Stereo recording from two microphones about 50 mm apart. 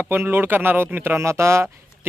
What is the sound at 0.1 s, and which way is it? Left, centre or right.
Speech, right.